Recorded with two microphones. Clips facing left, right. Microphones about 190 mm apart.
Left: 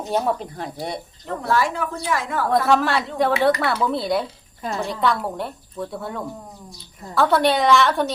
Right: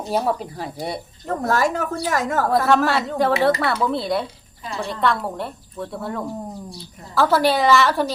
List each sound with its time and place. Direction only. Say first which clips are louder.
0.1 s a woman's voice: even; 5° right (ahead or behind)
1.3 s a woman's voice: right 2 dB; 45° right (ahead or behind)
2.6 s a woman's voice: right 1 dB; centre (ahead or behind)